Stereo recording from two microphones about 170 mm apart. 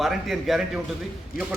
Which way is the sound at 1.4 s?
55° left (ahead or behind).